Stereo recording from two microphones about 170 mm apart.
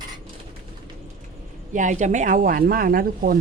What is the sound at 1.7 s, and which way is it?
Speech, 45° right (ahead or behind).